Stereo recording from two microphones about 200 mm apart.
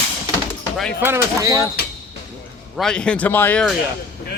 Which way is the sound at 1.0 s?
15° right (ahead or behind).